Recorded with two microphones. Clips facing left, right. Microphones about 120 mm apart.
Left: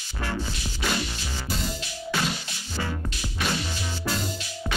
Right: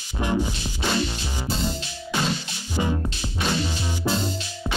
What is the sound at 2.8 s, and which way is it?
Music, 20° right (ahead or behind).